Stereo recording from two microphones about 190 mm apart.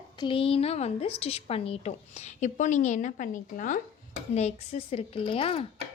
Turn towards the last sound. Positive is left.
turn(degrees=30)  # may be behind; listen again after turning